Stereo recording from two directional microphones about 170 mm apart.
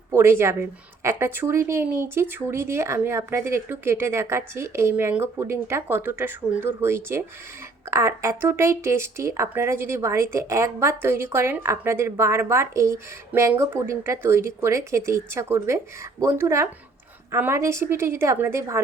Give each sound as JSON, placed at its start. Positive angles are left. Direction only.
{"t": 0.1, "sound": "a woman's voice", "side_deg": -15}